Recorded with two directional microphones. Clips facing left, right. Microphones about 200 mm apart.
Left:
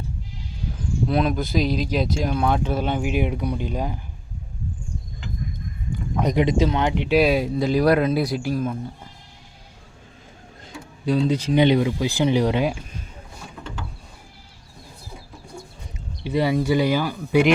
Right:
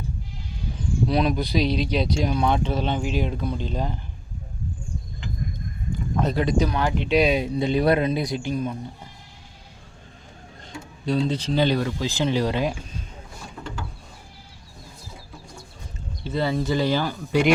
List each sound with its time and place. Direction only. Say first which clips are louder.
1.0 s speech: left 1 dB; centre (ahead or behind)
6.1 s speech: left 3 dB; 15° left (ahead or behind)
7.1 s speech: left 2 dB; 5° left (ahead or behind)
10.7 s speech: left 2 dB; 10° left (ahead or behind)
16.2 s speech: left 3 dB; 15° left (ahead or behind)